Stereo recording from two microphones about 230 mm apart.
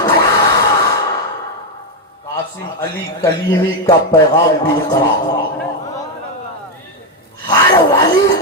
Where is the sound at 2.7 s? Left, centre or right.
Centre.